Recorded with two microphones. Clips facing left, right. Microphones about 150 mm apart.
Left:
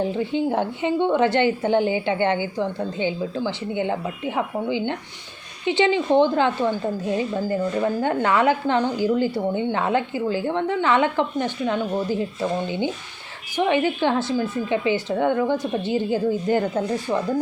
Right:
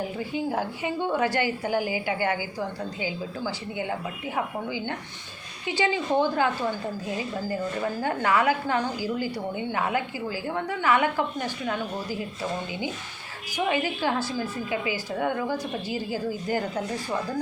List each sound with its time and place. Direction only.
0.0 s a woman's voice: 25° left (ahead or behind)